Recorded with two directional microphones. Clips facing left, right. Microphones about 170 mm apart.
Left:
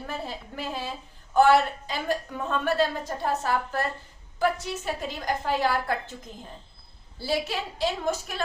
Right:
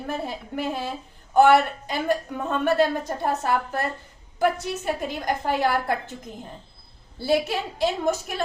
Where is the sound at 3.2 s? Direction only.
50° right (ahead or behind).